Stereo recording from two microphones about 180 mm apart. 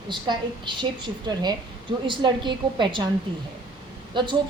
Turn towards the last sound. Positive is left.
turn(degrees=-25)  # may be behind; listen again after turning